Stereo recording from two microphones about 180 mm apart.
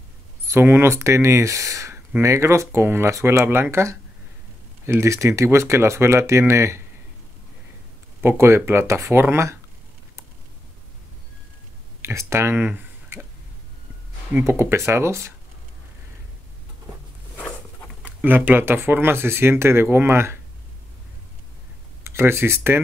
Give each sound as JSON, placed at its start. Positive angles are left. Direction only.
{"t": 0.5, "sound": "speech", "side_deg": -15}
{"t": 8.2, "sound": "speech", "side_deg": -15}
{"t": 12.0, "sound": "speech", "side_deg": -15}
{"t": 14.3, "sound": "speech", "side_deg": -15}
{"t": 17.4, "sound": "a sound", "side_deg": 10}
{"t": 18.0, "sound": "speech", "side_deg": -10}
{"t": 22.0, "sound": "speech", "side_deg": -15}